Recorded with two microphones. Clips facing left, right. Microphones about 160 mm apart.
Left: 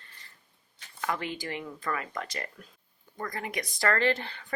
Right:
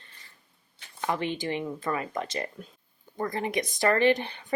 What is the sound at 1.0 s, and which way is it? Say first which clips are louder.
A woman's voice: right 4 dB; 25° right (ahead or behind).